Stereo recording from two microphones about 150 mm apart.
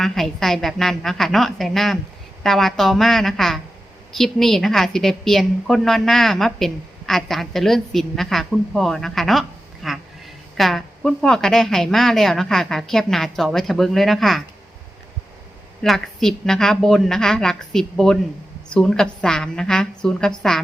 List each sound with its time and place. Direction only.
0.0 s a woman's voice: centre (ahead or behind)
15.8 s a woman's voice: 5° left (ahead or behind)